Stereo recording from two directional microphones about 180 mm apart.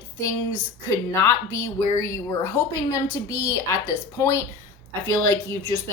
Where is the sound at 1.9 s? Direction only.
15° left (ahead or behind).